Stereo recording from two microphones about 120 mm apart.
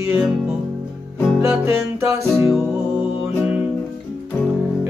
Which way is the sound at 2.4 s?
5° right (ahead or behind).